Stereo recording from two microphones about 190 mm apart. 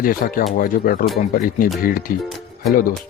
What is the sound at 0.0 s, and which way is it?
Speech, 50° left (ahead or behind).